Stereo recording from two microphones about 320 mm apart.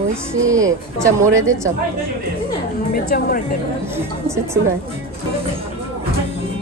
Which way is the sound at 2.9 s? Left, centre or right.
Left.